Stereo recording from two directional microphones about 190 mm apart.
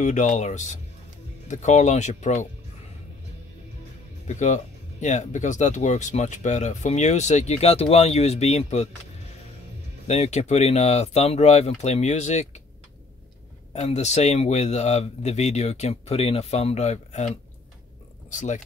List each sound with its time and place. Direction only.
0.0 s speech: 40° left (ahead or behind)
4.3 s speech: 35° left (ahead or behind)
10.0 s speech: 35° left (ahead or behind)
13.7 s speech: 35° left (ahead or behind)
18.3 s speech: 40° left (ahead or behind)